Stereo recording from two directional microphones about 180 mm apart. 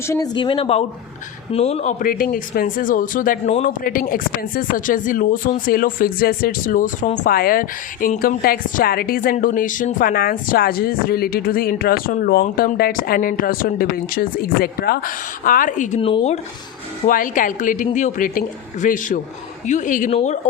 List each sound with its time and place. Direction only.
0.1 s speech: 25° left (ahead or behind); by 16.0 s 45° left (ahead or behind)
16.0 s speech: 30° left (ahead or behind)
17.1 s speech: 50° left (ahead or behind)